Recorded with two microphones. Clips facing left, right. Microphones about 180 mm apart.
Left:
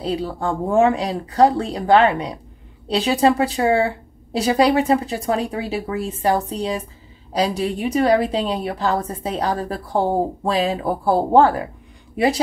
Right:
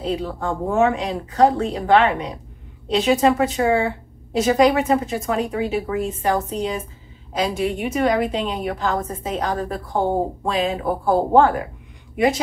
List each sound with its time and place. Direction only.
0.0 s a woman's voice: 35° left (ahead or behind)